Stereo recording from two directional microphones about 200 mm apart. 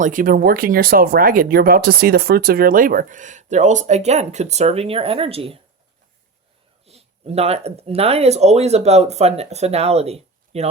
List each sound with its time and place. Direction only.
0.0 s speech: 40° right (ahead or behind)
6.8 s speech: 30° right (ahead or behind)